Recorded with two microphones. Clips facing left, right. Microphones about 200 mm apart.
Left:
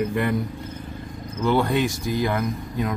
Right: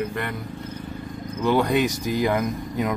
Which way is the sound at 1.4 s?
15° right (ahead or behind).